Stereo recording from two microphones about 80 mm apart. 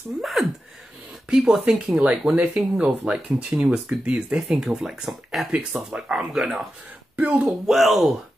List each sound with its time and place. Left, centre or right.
0.2 s speech: centre
7.2 s a sound: centre
7.4 s speech: centre